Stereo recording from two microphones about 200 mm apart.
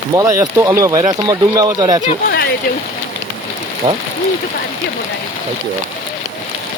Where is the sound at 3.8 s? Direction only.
35° right (ahead or behind).